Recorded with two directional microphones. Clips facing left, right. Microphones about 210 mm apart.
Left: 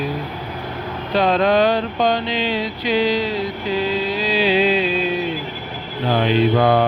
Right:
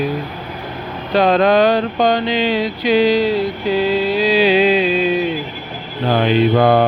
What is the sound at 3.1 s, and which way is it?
Music, 10° right (ahead or behind).